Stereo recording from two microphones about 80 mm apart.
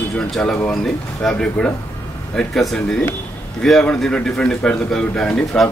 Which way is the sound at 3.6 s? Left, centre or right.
Centre.